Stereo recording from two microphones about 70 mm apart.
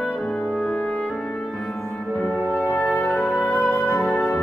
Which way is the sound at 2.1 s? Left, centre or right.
Left.